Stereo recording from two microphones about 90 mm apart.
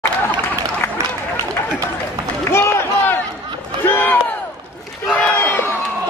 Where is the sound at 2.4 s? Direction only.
30° left (ahead or behind).